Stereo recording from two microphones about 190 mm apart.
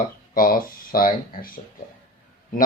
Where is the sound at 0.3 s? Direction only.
50° left (ahead or behind).